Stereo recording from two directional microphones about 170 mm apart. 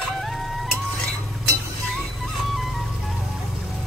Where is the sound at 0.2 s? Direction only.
Centre (ahead or behind).